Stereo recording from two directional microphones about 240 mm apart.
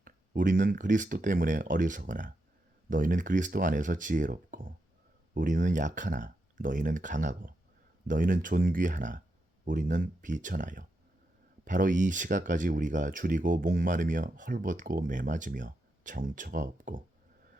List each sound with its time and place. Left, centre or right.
0.0 s speech: right